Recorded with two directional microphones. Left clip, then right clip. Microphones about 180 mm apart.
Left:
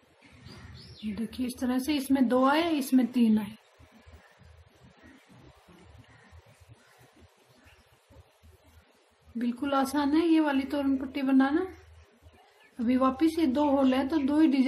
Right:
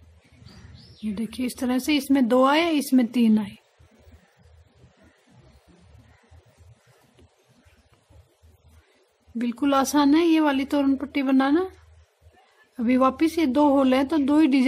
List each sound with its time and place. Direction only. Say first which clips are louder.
1.1 s a woman's voice: right 5 dB; 30° right (ahead or behind)
9.4 s a woman's voice: right 6 dB; 35° right (ahead or behind)
12.7 s a woman's voice: right 6 dB; 35° right (ahead or behind)